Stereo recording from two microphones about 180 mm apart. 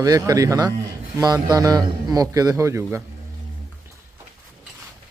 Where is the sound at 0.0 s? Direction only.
20° right (ahead or behind).